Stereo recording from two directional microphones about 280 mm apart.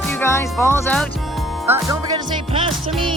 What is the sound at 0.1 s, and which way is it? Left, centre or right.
Speech, centre.